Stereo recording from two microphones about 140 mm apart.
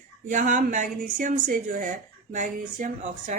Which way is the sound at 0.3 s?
65° right (ahead or behind).